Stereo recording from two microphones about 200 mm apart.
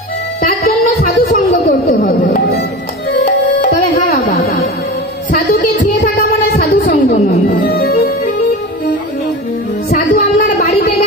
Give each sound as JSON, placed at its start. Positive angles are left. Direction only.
{"t": 0.4, "sound": "music", "side_deg": 45}
{"t": 3.1, "sound": "music", "side_deg": 55}
{"t": 4.3, "sound": "music", "side_deg": 40}
{"t": 10.1, "sound": "a sound", "side_deg": 45}